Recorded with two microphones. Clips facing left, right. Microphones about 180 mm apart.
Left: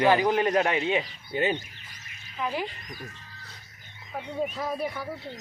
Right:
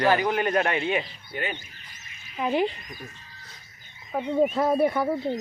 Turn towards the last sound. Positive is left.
turn(degrees=-55)  # may be behind; listen again after turning